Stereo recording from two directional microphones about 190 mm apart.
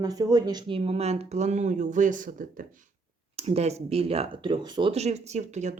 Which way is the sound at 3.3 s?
30° right (ahead or behind).